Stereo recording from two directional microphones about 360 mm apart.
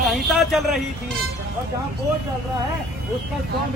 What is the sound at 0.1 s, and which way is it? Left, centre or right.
Speech, centre.